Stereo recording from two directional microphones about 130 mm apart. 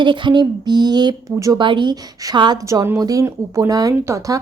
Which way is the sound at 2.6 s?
20° right (ahead or behind).